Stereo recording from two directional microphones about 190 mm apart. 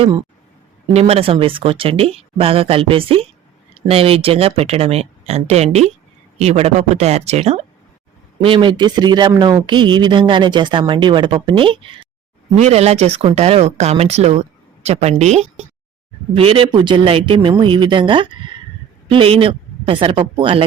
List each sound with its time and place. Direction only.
0.9 s speech: 30° right (ahead or behind)